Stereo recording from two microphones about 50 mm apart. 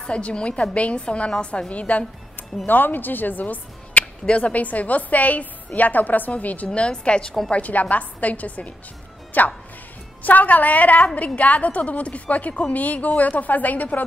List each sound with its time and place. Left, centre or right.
0.0 s a woman's voice: left
2.6 s a woman's voice: left; by 7.3 s centre
7.5 s a woman's voice: left